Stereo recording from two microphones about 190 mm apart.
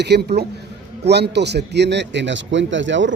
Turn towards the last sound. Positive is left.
turn(degrees=-75)  # may be behind; listen again after turning